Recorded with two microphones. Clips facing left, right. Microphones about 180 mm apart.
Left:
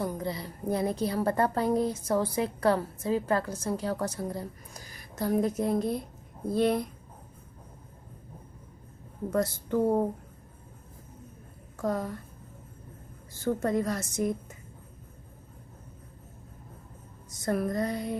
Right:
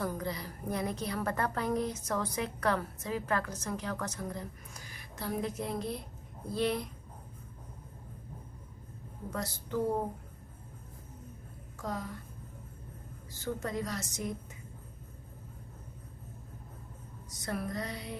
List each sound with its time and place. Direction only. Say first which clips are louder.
0.0 s a woman's voice: left 3 dB; 25° left (ahead or behind); by 6.8 s 50° left (ahead or behind)
9.3 s a woman's voice: left 8 dB; 55° left (ahead or behind)
11.8 s a woman's voice: left 8 dB; 55° left (ahead or behind)
13.3 s a woman's voice: left 8 dB; 50° left (ahead or behind)
17.4 s a woman's voice: left 8 dB; 50° left (ahead or behind)